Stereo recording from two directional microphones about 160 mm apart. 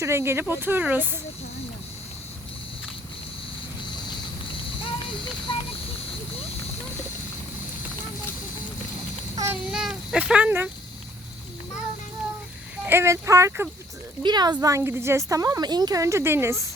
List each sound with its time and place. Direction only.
0.0 s speech: 15° right (ahead or behind)
9.3 s child singing: 20° right (ahead or behind)
9.7 s speech: 5° right (ahead or behind)
12.8 s a woman's voice: 15° right (ahead or behind)